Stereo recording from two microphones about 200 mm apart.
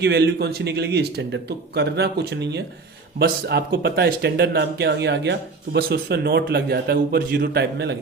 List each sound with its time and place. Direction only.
0.0 s speech: 55° right (ahead or behind)